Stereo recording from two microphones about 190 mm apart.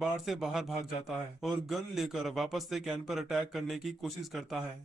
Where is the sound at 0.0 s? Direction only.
Centre (ahead or behind).